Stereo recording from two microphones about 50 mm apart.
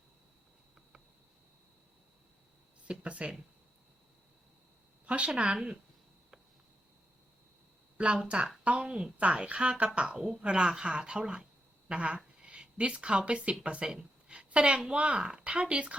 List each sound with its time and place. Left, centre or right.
2.8 s speech: right
5.0 s a woman's voice: right
7.9 s a woman's voice: right